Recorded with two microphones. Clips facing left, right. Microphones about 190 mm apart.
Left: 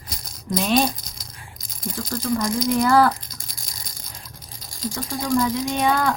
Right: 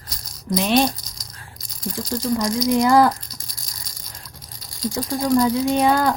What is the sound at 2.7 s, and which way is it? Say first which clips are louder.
Speech: right 2 dB; 15° right (ahead or behind).